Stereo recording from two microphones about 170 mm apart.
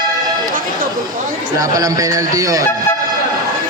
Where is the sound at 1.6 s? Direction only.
20° right (ahead or behind).